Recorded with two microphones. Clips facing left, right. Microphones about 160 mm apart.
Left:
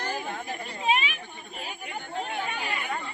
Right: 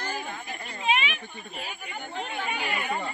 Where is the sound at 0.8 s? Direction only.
35° left (ahead or behind).